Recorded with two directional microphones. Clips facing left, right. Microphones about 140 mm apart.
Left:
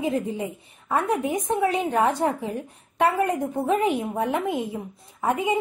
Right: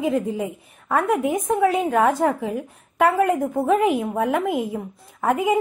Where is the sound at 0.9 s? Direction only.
90° right.